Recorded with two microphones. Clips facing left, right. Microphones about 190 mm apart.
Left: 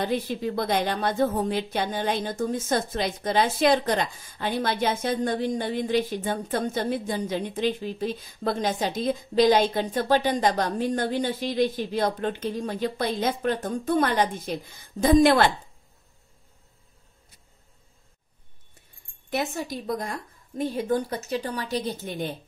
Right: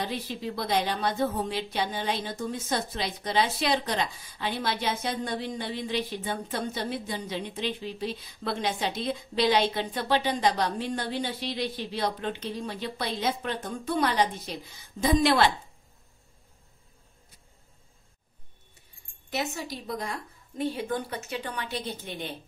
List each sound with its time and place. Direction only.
0.0 s a woman's voice: 50° left (ahead or behind)
19.3 s a woman's voice: 50° left (ahead or behind)